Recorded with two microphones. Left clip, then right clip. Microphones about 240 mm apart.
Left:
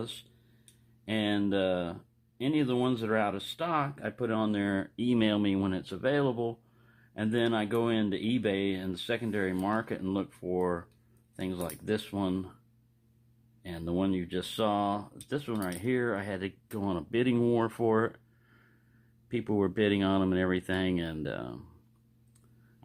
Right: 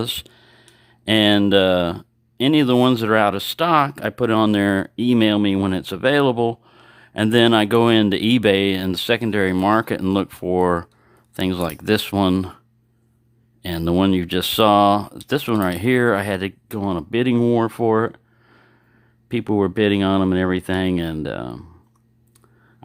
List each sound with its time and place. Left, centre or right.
0.0 s speech: right
13.6 s speech: right